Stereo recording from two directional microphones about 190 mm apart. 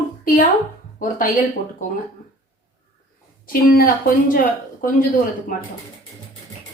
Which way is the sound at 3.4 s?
50° left (ahead or behind).